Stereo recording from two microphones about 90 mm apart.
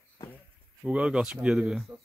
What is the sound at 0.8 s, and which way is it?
Speech, 15° right (ahead or behind).